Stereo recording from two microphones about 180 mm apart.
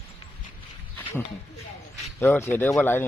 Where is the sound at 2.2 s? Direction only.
15° left (ahead or behind).